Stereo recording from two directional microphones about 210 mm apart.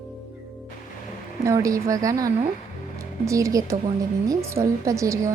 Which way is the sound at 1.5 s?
15° right (ahead or behind).